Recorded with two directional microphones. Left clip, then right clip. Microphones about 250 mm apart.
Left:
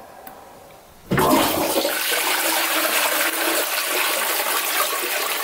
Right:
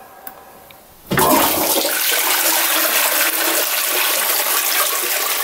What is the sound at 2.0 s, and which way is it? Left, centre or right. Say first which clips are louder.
Toilet flush: right 3 dB; centre.